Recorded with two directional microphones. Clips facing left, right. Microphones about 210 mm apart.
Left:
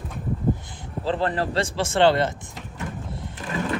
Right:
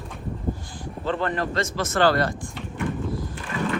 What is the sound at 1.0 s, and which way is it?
Speech, 30° left (ahead or behind).